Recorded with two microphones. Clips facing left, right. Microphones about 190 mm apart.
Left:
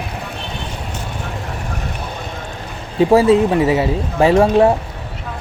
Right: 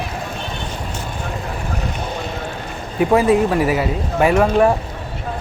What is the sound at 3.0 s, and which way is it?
Speech, 30° left (ahead or behind).